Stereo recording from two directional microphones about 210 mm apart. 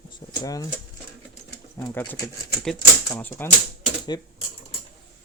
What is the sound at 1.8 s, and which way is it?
Speech, 15° left (ahead or behind).